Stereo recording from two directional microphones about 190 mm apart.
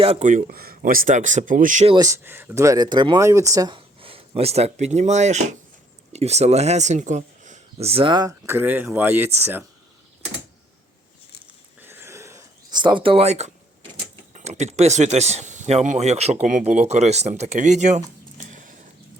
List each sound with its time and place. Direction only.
0.0 s speech: 30° right (ahead or behind)
0.3 s speech: 45° right (ahead or behind)
1.9 s speech: 20° right (ahead or behind)
11.4 s a sound: 10° right (ahead or behind); by 13.5 s 35° right (ahead or behind)
14.3 s speech: 35° right (ahead or behind)
18.3 s a sound: 45° right (ahead or behind)